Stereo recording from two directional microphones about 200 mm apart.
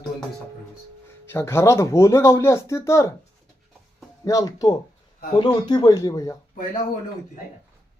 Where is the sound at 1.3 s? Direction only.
10° left (ahead or behind).